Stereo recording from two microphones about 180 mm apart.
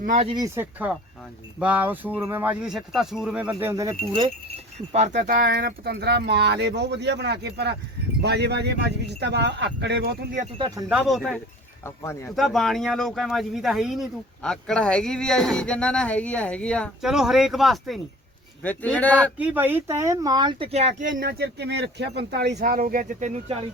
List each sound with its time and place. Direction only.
0.0 s speech: 45° right (ahead or behind)
0.3 s speech: 20° right (ahead or behind)
4.1 s speech: 30° right (ahead or behind); by 10.2 s 70° right (ahead or behind)
10.8 s speech: 5° right (ahead or behind)
11.8 s speech: 15° left (ahead or behind)
12.4 s speech: centre (ahead or behind)
19.4 s speech: 10° right (ahead or behind); by 23.6 s 35° right (ahead or behind)